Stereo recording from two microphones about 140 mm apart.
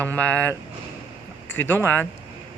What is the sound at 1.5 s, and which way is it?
Speech, 15° left (ahead or behind).